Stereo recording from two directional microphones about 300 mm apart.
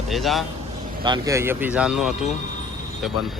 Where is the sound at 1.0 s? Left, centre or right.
Centre.